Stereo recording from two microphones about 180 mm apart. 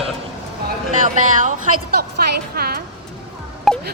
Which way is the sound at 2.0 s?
60° right (ahead or behind).